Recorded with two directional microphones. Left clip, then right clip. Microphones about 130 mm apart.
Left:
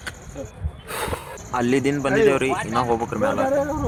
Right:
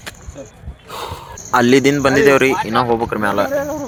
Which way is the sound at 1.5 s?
45° right (ahead or behind).